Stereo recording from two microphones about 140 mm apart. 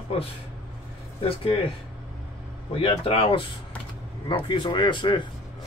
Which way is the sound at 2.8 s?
40° left (ahead or behind).